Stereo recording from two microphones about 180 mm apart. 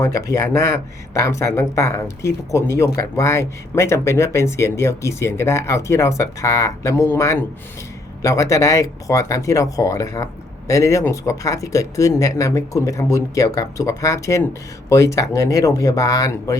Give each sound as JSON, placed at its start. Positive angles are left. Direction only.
{"t": 0.0, "sound": "speech", "side_deg": 20}